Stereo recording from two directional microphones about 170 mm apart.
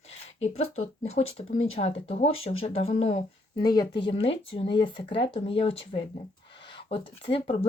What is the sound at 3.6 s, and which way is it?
Speech, 25° left (ahead or behind).